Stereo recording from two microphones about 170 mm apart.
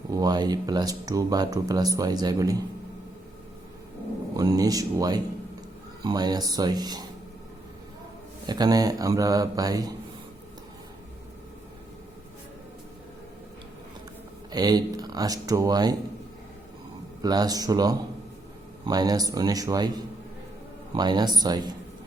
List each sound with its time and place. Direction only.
0.1 s speech: 25° right (ahead or behind)
4.4 s speech: 20° right (ahead or behind)
8.4 s speech: 25° right (ahead or behind)
14.5 s speech: 25° right (ahead or behind)
17.2 s speech: 25° right (ahead or behind)